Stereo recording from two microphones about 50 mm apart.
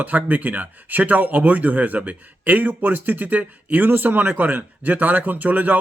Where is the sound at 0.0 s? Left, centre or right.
Right.